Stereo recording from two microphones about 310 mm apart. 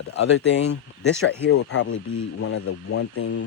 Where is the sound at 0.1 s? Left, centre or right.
Left.